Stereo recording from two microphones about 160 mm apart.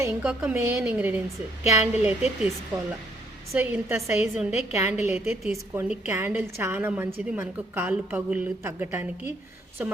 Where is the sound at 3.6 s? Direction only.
15° right (ahead or behind).